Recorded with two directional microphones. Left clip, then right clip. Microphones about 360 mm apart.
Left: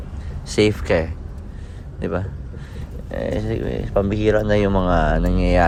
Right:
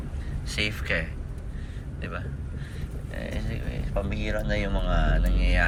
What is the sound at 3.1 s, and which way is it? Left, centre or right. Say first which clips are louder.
Speech: left 13 dB; centre.